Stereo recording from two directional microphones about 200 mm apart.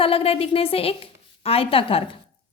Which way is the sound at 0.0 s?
30° left (ahead or behind).